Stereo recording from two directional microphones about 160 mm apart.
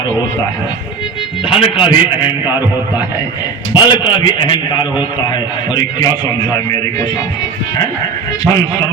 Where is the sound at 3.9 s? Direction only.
30° left (ahead or behind).